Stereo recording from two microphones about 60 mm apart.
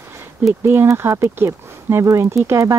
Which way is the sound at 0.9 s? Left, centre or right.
Right.